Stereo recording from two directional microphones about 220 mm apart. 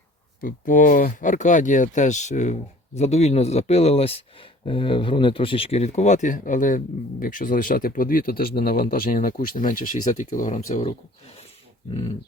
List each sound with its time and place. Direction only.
0.4 s speech: 35° left (ahead or behind)